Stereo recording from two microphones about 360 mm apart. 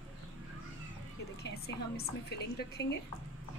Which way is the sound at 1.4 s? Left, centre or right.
Left.